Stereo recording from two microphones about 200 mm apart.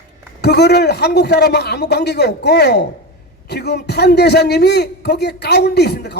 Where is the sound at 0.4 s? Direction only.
55° left (ahead or behind).